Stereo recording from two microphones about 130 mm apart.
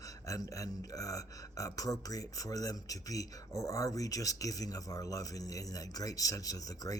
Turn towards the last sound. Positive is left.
turn(degrees=25)  # may be behind; listen again after turning